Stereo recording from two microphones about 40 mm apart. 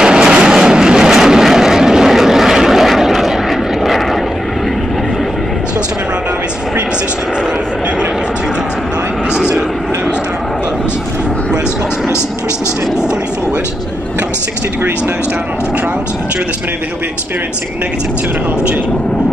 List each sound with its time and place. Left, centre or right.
0.0 s vehicle: right; by 4.2 s centre